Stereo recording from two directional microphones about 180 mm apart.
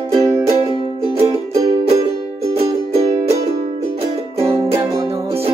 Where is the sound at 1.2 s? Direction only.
20° right (ahead or behind).